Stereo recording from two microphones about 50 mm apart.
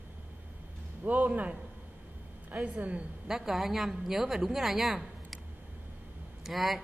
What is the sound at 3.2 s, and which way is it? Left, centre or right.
Speech, centre.